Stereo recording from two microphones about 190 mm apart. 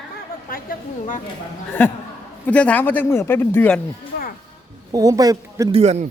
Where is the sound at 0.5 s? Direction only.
45° left (ahead or behind).